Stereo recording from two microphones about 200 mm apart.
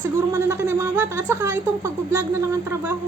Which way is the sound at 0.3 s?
10° right (ahead or behind).